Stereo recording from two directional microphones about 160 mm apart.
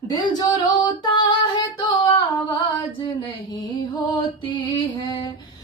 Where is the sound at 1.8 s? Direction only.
25° left (ahead or behind).